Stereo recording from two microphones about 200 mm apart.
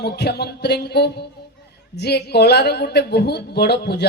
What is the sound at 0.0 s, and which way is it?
A man's voice, 55° left (ahead or behind).